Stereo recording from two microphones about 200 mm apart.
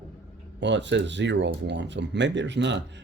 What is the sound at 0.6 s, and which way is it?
Speech, 60° right (ahead or behind).